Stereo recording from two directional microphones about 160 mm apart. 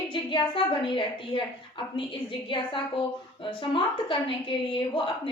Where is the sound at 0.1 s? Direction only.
30° left (ahead or behind).